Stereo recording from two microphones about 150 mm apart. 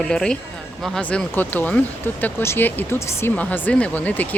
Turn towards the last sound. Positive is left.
turn(degrees=10)  # may be behind; listen again after turning